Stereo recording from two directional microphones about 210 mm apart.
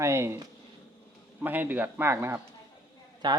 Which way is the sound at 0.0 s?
15° right (ahead or behind).